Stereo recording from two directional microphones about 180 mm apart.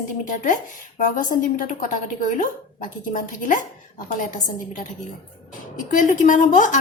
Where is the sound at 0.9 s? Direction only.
45° left (ahead or behind).